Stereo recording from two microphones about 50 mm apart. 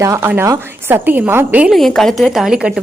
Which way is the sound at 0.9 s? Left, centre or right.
Right.